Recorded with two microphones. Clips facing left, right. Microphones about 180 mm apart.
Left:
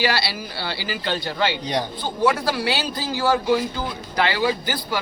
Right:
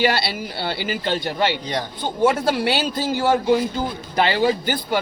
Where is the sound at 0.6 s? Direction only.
50° right (ahead or behind).